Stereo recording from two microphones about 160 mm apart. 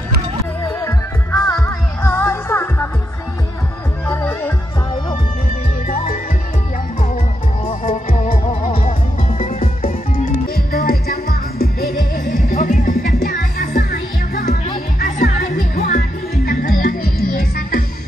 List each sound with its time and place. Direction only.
0.7 s music: 15° left (ahead or behind)
4.1 s music: 15° left (ahead or behind)
7.9 s music: 50° left (ahead or behind)
8.5 s music: 40° left (ahead or behind)
9.8 s music: 65° left (ahead or behind)
12.4 s music: 55° left (ahead or behind)